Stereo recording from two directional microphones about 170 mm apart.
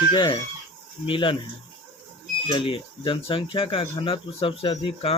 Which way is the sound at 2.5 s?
30° left (ahead or behind).